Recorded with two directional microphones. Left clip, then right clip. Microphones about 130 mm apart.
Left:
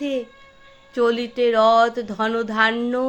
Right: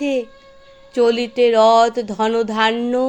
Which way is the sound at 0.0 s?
50° right (ahead or behind).